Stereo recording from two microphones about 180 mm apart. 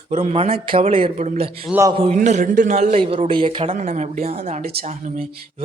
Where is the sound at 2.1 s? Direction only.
45° right (ahead or behind); by 3.7 s 30° right (ahead or behind).